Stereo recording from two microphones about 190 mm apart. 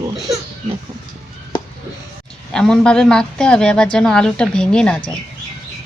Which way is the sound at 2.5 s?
5° left (ahead or behind).